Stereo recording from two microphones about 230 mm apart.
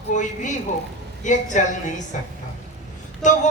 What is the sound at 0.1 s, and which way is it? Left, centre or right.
A woman's voice, left.